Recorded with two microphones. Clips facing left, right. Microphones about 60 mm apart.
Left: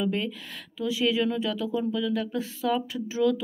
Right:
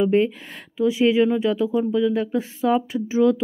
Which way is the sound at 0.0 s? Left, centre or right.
Right.